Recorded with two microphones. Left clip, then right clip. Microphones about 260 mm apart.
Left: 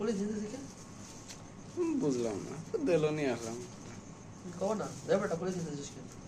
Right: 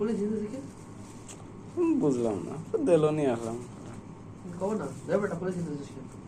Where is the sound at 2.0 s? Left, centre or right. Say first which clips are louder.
Right 6 dB; centre.